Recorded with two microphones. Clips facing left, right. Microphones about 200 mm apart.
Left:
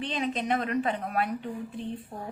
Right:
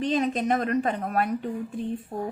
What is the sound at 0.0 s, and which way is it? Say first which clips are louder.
Speech: right 6 dB; 45° right (ahead or behind).